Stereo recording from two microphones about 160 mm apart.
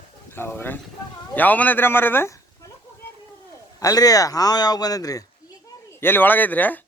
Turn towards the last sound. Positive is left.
turn(degrees=10)  # may be behind; listen again after turning